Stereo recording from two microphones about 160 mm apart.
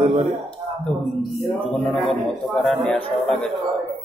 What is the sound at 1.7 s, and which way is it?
Speech, centre (ahead or behind).